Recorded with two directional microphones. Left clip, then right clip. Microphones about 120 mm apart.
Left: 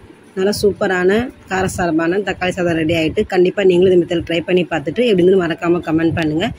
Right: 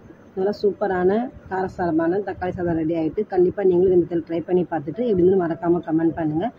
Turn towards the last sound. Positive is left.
turn(degrees=45)  # may be behind; listen again after turning